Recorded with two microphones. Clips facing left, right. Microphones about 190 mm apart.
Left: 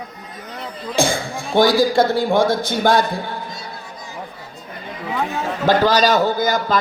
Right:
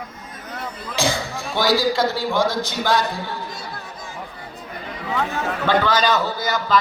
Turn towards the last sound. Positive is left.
turn(degrees=50)  # may be behind; listen again after turning